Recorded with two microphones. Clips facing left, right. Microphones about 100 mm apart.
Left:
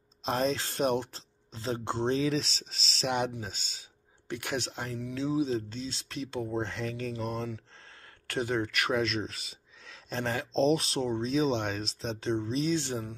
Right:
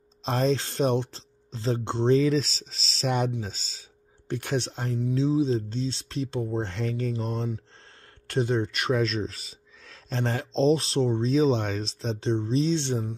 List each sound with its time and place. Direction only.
0.2 s speech: 35° right (ahead or behind)